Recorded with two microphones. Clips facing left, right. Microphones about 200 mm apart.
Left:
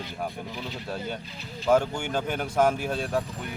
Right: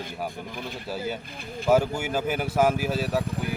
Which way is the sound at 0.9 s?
5° right (ahead or behind).